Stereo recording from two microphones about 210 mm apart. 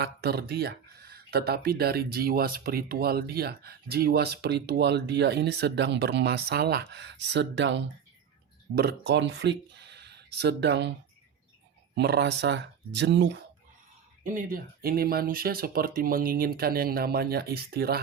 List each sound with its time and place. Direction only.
0.0 s speech: 50° right (ahead or behind)
11.9 s speech: 50° right (ahead or behind)
14.3 s speech: 40° right (ahead or behind)